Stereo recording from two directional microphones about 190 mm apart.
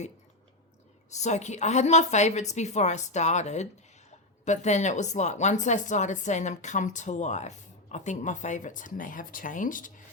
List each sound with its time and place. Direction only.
1.1 s speech: 35° left (ahead or behind)